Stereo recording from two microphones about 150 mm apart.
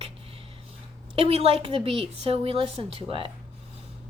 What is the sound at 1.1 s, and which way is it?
A woman's voice, 40° right (ahead or behind).